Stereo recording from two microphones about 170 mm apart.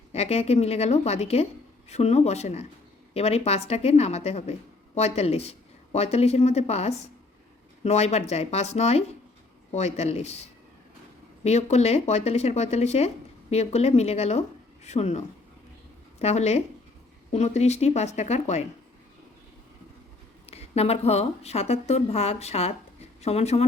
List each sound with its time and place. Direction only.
0.1 s a woman's voice: 40° left (ahead or behind)
20.5 s a woman's voice: 35° left (ahead or behind)